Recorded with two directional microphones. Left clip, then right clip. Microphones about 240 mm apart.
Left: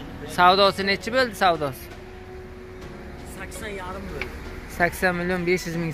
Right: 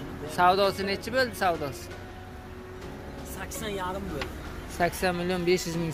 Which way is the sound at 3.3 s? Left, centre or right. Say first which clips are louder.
Even; right.